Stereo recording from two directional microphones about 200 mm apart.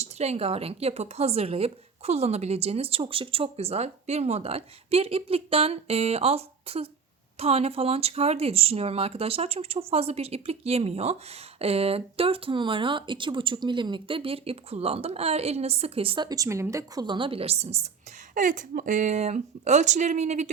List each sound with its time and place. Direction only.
0.0 s speech: 35° right (ahead or behind)